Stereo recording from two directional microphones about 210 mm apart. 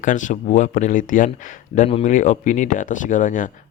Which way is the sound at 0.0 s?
35° left (ahead or behind).